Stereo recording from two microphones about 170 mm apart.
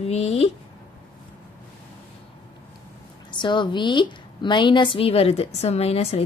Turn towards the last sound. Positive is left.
turn(degrees=35)  # may be behind; listen again after turning